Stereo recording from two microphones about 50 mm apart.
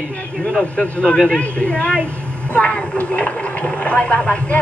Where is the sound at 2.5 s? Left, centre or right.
Left.